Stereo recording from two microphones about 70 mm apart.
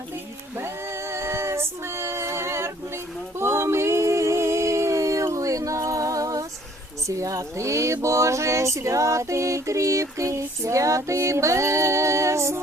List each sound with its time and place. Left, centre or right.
0.5 s female singing: right
7.1 s speech: right